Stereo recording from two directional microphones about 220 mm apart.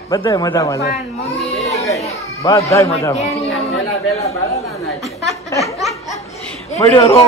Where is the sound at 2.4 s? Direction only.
15° left (ahead or behind).